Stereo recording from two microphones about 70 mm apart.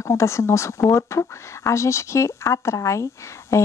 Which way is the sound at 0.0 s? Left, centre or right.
Left.